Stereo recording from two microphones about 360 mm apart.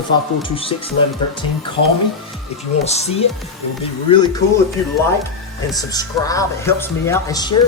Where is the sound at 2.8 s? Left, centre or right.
Centre.